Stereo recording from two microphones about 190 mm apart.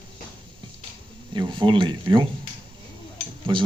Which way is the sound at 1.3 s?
25° right (ahead or behind).